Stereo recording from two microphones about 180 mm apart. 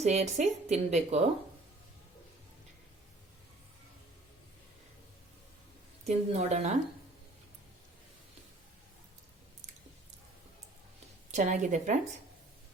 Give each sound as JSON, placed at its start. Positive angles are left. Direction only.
{"t": 0.0, "sound": "speech", "side_deg": -40}
{"t": 6.1, "sound": "speech", "side_deg": -40}
{"t": 11.3, "sound": "speech", "side_deg": -40}